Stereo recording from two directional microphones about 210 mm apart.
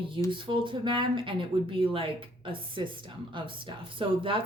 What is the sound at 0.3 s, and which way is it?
A woman's voice, 25° right (ahead or behind).